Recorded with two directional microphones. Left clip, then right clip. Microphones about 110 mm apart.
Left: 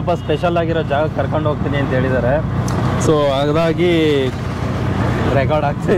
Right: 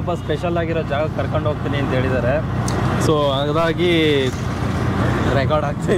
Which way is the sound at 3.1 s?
40° left (ahead or behind).